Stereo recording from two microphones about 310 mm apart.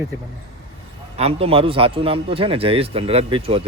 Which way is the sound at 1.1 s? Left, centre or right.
Centre.